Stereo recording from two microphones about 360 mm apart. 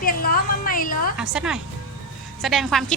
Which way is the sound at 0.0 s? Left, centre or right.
Left.